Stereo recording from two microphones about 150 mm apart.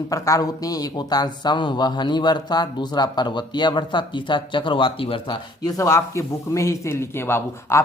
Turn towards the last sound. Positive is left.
turn(degrees=15)  # may be behind; listen again after turning